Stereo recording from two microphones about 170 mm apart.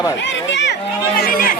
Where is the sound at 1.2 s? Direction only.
55° left (ahead or behind).